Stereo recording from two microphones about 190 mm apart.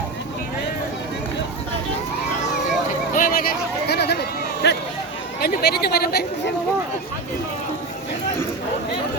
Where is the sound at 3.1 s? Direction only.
50° left (ahead or behind).